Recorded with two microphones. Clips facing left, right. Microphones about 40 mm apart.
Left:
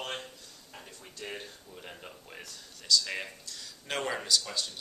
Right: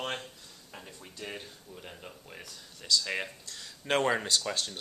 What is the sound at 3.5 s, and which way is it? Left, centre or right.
Speech, right.